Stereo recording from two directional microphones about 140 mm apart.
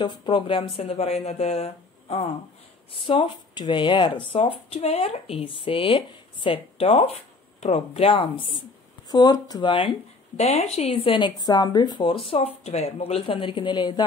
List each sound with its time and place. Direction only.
0.0 s speech: 30° left (ahead or behind)
10.3 s speech: 50° left (ahead or behind); by 14.0 s 35° left (ahead or behind)